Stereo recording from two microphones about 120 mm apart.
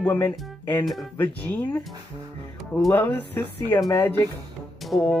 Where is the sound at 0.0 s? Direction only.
15° left (ahead or behind).